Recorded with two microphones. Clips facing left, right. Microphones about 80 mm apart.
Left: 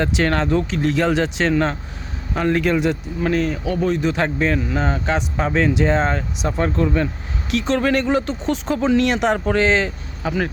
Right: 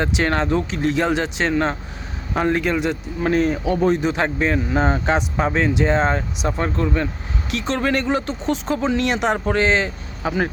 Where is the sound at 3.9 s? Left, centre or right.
Centre.